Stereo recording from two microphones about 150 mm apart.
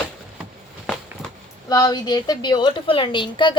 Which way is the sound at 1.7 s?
25° left (ahead or behind).